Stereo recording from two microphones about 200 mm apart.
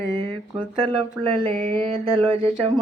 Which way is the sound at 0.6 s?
25° right (ahead or behind).